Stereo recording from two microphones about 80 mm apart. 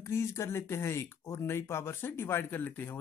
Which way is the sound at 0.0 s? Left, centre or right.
Left.